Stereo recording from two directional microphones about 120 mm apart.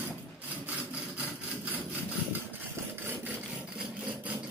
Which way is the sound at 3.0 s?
20° right (ahead or behind).